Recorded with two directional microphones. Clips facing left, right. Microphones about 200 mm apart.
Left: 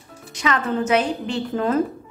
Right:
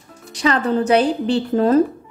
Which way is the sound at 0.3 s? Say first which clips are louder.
Right 5 dB; 35° right (ahead or behind).